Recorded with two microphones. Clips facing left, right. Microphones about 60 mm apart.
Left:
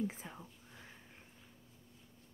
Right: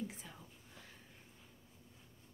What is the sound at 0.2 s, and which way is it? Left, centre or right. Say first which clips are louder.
Whispering: left 5 dB; left.